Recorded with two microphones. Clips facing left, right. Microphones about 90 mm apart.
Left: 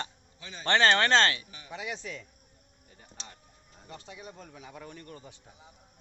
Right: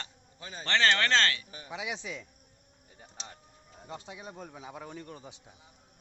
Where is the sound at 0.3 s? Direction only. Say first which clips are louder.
Right 2 dB; 40° right (ahead or behind).